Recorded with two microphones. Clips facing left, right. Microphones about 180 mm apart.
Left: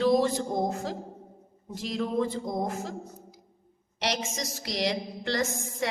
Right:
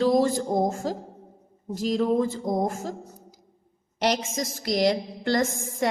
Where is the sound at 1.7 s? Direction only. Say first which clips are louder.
Right 6 dB; 40° right (ahead or behind).